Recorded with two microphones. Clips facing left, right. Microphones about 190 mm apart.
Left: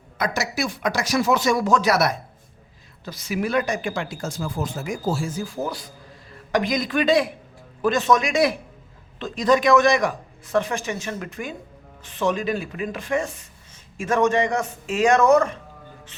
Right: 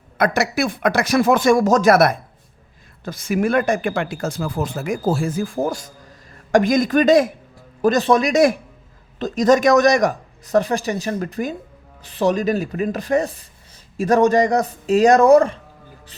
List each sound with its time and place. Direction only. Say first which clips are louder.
0.2 s speech: right 6 dB; 60° right (ahead or behind); by 15.5 s 30° right (ahead or behind)